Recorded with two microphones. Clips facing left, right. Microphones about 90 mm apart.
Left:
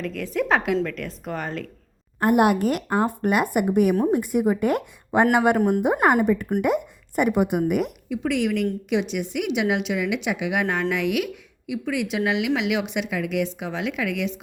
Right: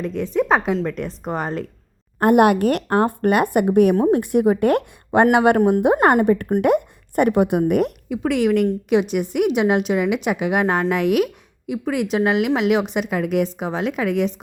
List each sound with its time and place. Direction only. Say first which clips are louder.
0.0 s a woman's voice: right 5 dB; 25° right (ahead or behind)
2.1 s speech: right 4 dB; 55° right (ahead or behind)
4.0 s speech: right 4 dB; 75° right (ahead or behind)
5.5 s a woman's voice: right 4 dB; 30° right (ahead or behind)
5.8 s a woman's voice: right 4 dB; 70° right (ahead or behind); by 14.4 s 40° right (ahead or behind)